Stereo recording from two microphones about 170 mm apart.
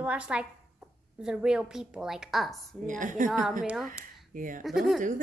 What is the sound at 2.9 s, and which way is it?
Speech, 50° right (ahead or behind).